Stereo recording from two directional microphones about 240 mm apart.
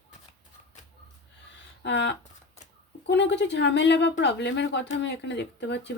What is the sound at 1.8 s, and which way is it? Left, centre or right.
Speech, left.